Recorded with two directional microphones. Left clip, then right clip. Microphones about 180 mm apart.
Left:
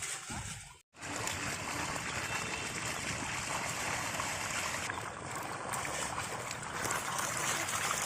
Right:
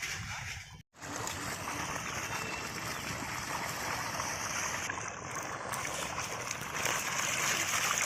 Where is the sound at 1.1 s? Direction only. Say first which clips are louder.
Left 1 dB; 5° right (ahead or behind).